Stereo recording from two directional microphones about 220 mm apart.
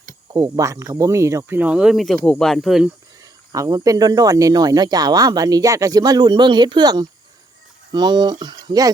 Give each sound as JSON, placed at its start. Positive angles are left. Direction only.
{"t": 0.3, "sound": "speech", "side_deg": -15}
{"t": 3.5, "sound": "speech", "side_deg": -15}